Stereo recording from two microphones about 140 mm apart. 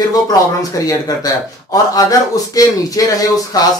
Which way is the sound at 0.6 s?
25° left (ahead or behind).